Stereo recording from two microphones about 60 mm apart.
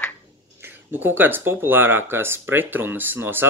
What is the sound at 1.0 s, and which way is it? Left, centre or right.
Speech, right.